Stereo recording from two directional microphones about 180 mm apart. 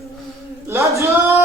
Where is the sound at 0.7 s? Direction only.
15° right (ahead or behind).